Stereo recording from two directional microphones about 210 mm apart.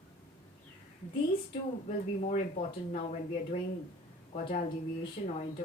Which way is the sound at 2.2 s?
35° left (ahead or behind).